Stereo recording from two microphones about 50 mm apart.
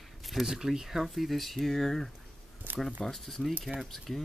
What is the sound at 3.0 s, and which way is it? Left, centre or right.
Speech, centre.